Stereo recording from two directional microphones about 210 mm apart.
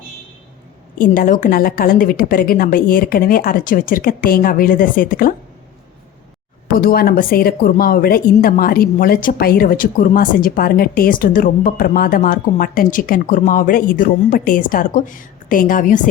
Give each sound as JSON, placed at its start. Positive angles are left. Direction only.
{"t": 0.9, "sound": "a woman's voice", "side_deg": 40}
{"t": 6.7, "sound": "a woman's voice", "side_deg": 45}